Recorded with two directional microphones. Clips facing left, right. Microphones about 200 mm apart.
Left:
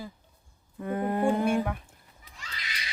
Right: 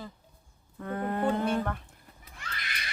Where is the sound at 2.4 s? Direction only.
55° right (ahead or behind).